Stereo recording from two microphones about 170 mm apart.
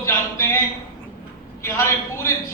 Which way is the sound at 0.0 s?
15° left (ahead or behind).